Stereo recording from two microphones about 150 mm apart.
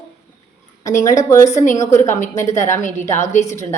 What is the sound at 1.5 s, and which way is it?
Speech, 55° left (ahead or behind).